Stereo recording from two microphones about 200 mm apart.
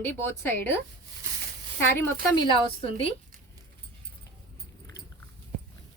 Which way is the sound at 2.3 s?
20° left (ahead or behind).